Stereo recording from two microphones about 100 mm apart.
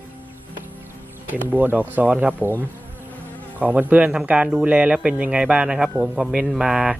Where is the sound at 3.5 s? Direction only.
15° right (ahead or behind).